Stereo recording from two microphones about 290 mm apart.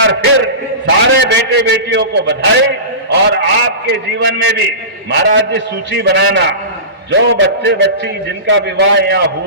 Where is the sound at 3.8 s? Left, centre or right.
Right.